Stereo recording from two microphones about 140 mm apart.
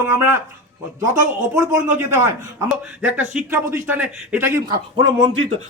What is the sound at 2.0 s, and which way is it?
Speech, 20° right (ahead or behind).